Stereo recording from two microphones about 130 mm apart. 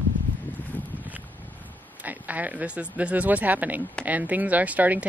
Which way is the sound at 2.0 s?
10° right (ahead or behind).